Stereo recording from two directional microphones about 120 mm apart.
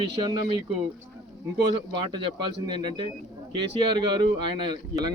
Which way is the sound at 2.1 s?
40° right (ahead or behind).